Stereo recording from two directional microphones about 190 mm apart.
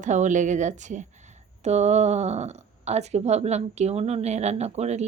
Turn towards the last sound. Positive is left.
turn(degrees=-35)  # may be behind; listen again after turning